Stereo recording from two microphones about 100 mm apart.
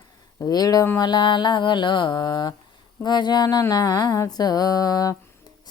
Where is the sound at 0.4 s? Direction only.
40° left (ahead or behind).